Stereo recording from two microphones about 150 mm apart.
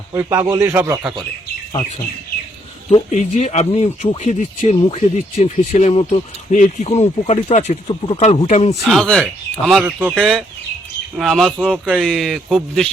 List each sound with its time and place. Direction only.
0.1 s a man's voice: 15° right (ahead or behind)
3.1 s speech: 50° left (ahead or behind)
8.8 s speech: centre (ahead or behind)